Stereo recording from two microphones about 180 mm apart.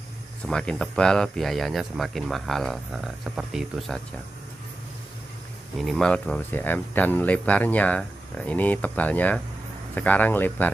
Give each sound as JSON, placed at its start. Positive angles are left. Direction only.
{"t": 0.5, "sound": "speech", "side_deg": 5}
{"t": 5.8, "sound": "speech", "side_deg": 0}